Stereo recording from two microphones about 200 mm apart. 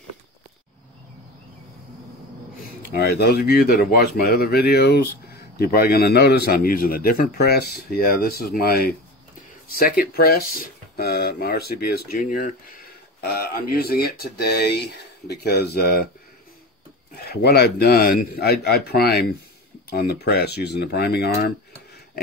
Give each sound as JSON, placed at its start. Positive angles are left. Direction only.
{"t": 2.9, "sound": "speech", "side_deg": 50}
{"t": 17.2, "sound": "speech", "side_deg": 50}